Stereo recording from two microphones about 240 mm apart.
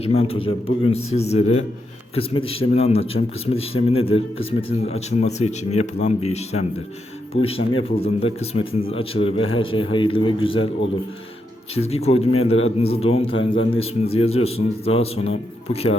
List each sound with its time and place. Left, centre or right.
0.0 s speech: left
11.7 s speech: left